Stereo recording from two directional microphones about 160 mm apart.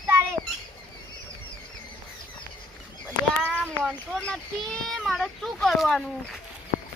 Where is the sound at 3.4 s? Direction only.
10° left (ahead or behind).